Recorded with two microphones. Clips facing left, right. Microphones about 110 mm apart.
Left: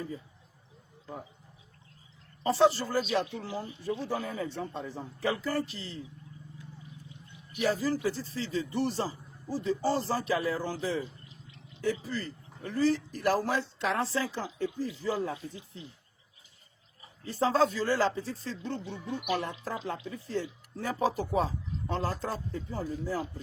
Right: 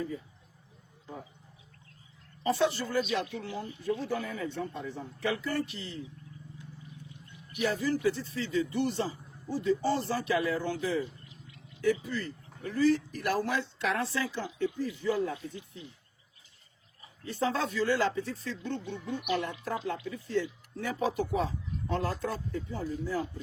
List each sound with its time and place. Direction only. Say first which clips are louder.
2.4 s speech: left 4 dB; 35° left (ahead or behind)
7.6 s speech: even; 35° left (ahead or behind)
17.2 s speech: left 5 dB; 35° left (ahead or behind)
20.1 s speech: right 3 dB; 35° left (ahead or behind)
22.8 s speech: left 2 dB; 45° left (ahead or behind)